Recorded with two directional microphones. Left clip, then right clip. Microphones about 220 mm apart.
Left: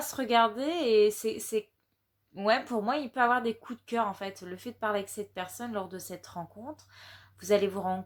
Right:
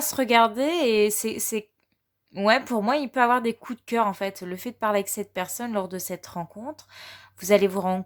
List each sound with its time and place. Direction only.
0.0 s speech: 45° right (ahead or behind)